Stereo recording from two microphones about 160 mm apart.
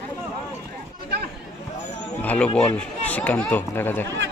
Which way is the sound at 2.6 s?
5° left (ahead or behind).